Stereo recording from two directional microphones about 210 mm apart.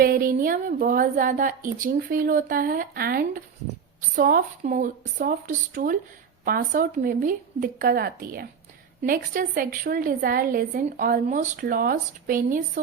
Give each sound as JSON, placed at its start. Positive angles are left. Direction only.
{"t": 0.0, "sound": "a woman's voice", "side_deg": -45}